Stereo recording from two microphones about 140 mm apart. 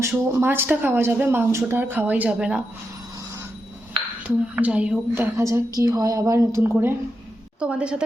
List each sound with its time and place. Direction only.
0.0 s speech: 20° right (ahead or behind)
4.2 s a woman's voice: 10° right (ahead or behind)